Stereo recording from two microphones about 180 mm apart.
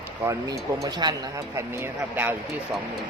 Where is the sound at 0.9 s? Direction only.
25° right (ahead or behind).